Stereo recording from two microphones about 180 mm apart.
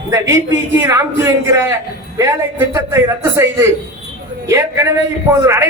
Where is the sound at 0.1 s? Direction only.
15° right (ahead or behind).